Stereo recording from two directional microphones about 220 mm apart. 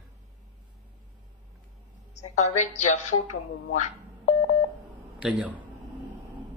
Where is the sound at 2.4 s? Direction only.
30° left (ahead or behind).